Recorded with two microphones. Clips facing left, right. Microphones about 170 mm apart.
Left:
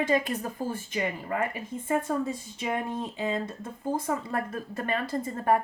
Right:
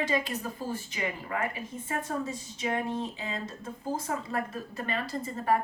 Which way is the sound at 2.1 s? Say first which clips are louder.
Left 4 dB; 45° left (ahead or behind).